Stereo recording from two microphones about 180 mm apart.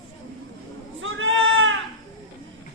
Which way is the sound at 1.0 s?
90° right.